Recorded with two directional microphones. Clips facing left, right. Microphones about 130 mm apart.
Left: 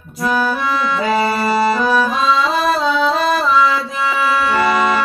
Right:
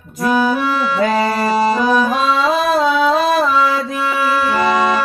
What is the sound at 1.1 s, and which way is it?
Music, 20° right (ahead or behind).